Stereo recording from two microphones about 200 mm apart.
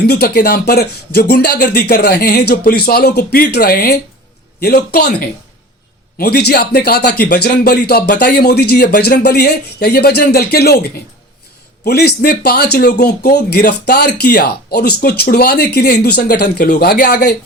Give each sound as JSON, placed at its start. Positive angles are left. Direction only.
{"t": 0.0, "sound": "speech", "side_deg": 50}
{"t": 6.1, "sound": "speech", "side_deg": 50}